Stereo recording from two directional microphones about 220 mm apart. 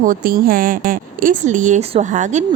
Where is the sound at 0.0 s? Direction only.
40° right (ahead or behind).